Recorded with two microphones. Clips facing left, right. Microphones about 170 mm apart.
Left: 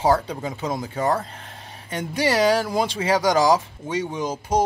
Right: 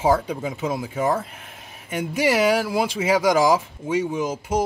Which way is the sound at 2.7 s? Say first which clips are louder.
Even; 40° left (ahead or behind).